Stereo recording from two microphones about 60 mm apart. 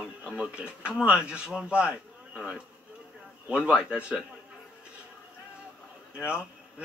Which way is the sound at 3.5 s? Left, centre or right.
Centre.